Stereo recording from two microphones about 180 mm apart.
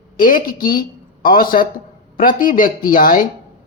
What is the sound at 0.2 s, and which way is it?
Speech, 50° left (ahead or behind).